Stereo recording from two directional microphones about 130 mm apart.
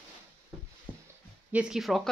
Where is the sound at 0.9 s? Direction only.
10° left (ahead or behind).